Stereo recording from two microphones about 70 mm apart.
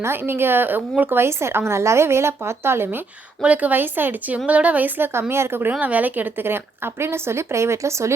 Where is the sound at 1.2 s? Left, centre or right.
Right.